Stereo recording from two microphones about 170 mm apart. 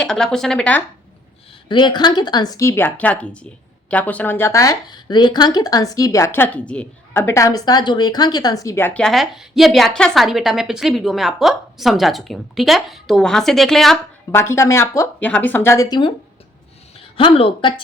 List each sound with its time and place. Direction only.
0.0 s speech: 5° left (ahead or behind)
1.6 s a woman's voice: 30° left (ahead or behind); by 14.0 s centre (ahead or behind)
14.3 s a woman's voice: 15° left (ahead or behind)